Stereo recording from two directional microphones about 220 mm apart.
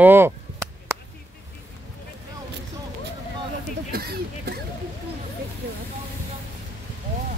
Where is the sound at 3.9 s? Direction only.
45° right (ahead or behind).